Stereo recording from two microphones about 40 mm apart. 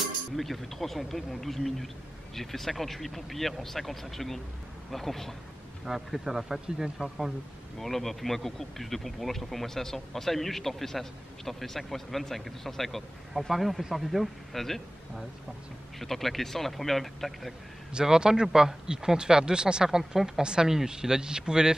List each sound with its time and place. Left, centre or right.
0.0 s speech: centre
5.9 s speech: centre
7.0 s speech: right
7.8 s speech: centre
16.0 s speech: centre
17.9 s speech: centre